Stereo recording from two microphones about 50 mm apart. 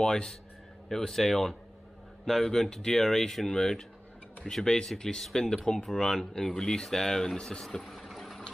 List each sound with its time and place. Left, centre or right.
0.0 s speech: centre
7.8 s vehicle: centre